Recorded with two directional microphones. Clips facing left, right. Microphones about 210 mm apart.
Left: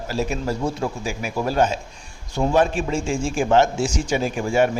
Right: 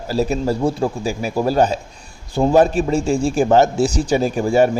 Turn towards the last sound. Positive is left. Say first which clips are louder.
# right 4 dB
turn(degrees=-35)  # may be behind; listen again after turning